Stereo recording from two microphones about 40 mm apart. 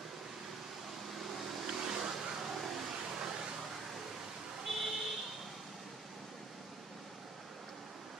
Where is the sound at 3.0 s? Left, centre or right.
Centre.